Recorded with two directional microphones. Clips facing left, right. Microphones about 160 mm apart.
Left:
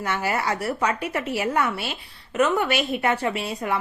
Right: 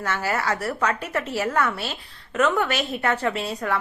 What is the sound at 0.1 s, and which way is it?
A woman's voice, 15° left (ahead or behind).